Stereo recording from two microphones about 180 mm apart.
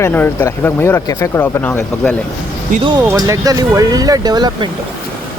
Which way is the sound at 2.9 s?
20° right (ahead or behind).